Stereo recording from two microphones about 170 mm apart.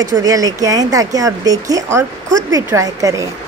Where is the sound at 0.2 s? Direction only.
20° right (ahead or behind).